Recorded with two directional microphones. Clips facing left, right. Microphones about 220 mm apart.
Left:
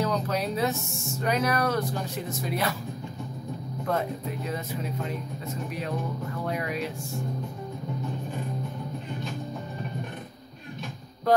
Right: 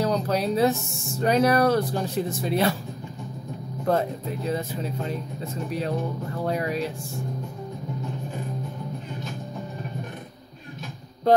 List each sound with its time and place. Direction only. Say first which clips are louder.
0.0 s music: right 3 dB; 35° right (ahead or behind)
1.2 s speech: right 6 dB; 30° right (ahead or behind)
3.9 s speech: right 5 dB; 30° right (ahead or behind)